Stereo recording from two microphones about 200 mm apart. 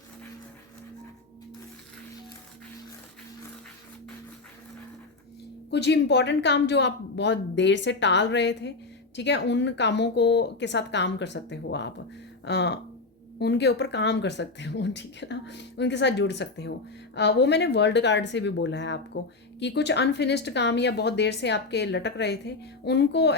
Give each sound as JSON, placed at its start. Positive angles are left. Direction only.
{"t": 5.7, "sound": "speech", "side_deg": 60}